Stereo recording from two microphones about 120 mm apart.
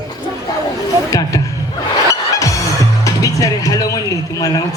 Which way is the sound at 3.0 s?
30° left (ahead or behind).